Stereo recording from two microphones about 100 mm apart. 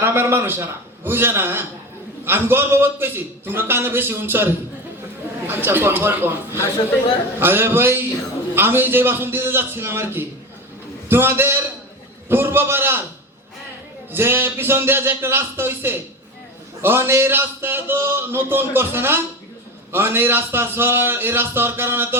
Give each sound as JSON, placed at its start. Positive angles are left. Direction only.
{"t": 0.0, "sound": "a man's voice", "side_deg": -25}
{"t": 5.5, "sound": "a man's voice", "side_deg": -20}
{"t": 14.1, "sound": "a man's voice", "side_deg": -25}